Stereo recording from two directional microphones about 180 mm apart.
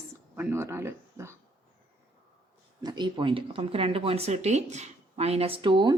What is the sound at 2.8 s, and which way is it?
Speech, 25° right (ahead or behind).